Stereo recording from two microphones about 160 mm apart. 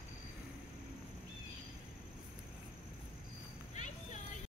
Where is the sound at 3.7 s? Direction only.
50° left (ahead or behind).